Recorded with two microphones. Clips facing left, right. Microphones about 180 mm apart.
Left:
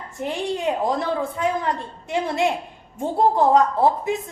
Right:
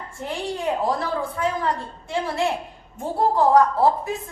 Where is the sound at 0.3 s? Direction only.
20° left (ahead or behind).